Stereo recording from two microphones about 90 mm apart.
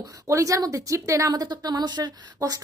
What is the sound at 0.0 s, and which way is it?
Speech, 35° right (ahead or behind).